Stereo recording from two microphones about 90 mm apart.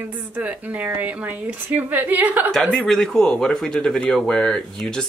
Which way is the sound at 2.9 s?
5° left (ahead or behind).